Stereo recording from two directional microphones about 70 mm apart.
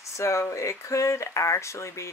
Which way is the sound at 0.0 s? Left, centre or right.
Left.